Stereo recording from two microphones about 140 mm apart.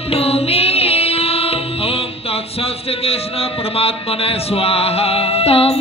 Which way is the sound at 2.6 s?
45° left (ahead or behind).